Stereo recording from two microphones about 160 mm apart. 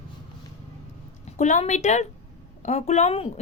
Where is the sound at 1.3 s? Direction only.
45° left (ahead or behind).